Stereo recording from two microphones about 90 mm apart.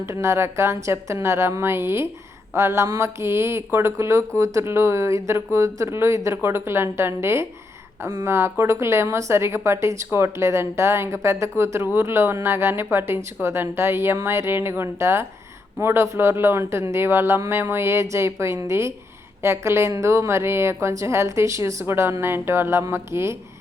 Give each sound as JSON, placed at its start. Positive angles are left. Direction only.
{"t": 0.1, "sound": "a woman's voice", "side_deg": -30}